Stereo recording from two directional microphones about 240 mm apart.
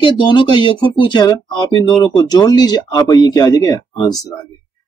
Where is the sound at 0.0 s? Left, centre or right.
Centre.